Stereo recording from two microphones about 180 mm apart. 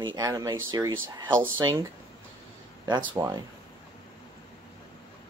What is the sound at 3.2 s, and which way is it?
Speech, 15° right (ahead or behind).